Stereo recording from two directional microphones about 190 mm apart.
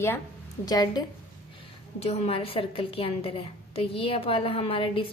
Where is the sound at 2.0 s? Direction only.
35° left (ahead or behind).